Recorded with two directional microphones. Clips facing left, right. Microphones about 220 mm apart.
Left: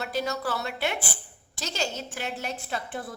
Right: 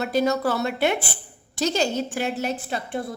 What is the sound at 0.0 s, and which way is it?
A woman's voice, 20° right (ahead or behind).